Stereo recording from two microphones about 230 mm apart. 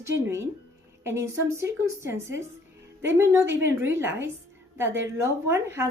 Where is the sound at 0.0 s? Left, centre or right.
Centre.